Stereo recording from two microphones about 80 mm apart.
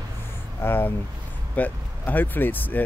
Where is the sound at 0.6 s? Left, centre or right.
Left.